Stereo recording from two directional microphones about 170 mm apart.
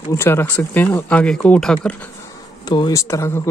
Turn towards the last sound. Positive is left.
turn(degrees=15)  # may be behind; listen again after turning